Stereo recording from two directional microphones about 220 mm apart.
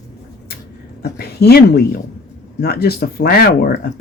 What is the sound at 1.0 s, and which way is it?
Speech, 45° left (ahead or behind).